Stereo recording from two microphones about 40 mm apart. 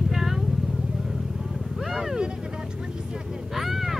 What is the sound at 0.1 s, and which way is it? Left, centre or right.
Vehicle, centre.